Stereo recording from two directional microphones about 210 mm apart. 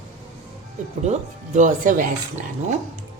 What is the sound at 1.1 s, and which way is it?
Speech, 35° right (ahead or behind).